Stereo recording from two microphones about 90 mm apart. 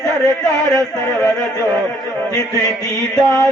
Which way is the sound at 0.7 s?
5° left (ahead or behind).